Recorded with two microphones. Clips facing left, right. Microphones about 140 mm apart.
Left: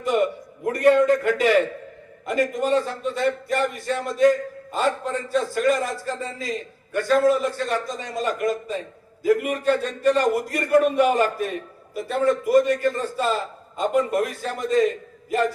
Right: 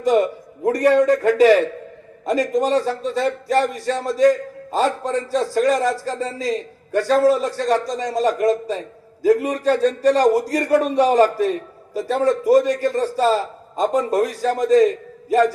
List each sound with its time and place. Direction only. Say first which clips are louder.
0.6 s a man's voice: right 2 dB; 35° right (ahead or behind)